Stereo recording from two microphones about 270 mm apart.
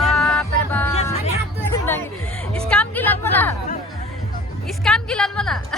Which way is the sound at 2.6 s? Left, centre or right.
Centre.